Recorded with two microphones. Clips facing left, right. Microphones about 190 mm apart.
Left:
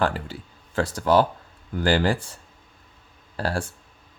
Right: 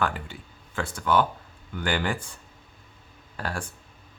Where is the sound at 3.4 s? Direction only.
30° left (ahead or behind).